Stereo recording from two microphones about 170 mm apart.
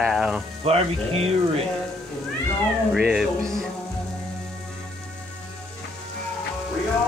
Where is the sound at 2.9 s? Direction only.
5° right (ahead or behind).